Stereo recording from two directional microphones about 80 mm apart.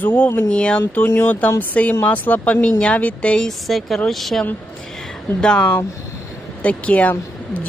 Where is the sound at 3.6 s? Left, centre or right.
Centre.